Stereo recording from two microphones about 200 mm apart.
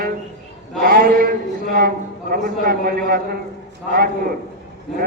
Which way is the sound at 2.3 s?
45° right (ahead or behind).